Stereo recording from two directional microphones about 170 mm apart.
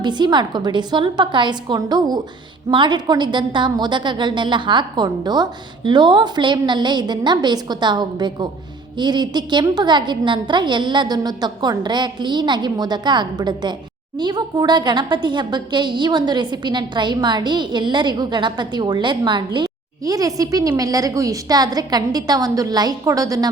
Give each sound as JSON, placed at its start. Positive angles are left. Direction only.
{"t": 0.0, "sound": "a woman's voice", "side_deg": -25}